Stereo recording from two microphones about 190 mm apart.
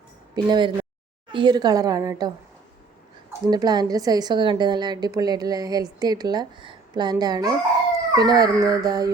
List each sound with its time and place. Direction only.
0.4 s a woman's voice: 25° right (ahead or behind)
3.4 s a woman's voice: 20° right (ahead or behind)